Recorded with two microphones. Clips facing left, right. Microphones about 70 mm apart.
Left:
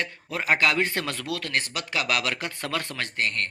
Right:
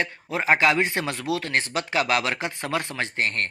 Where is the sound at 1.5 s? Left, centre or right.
Right.